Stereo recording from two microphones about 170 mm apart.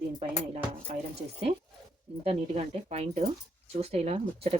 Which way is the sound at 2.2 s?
35° right (ahead or behind).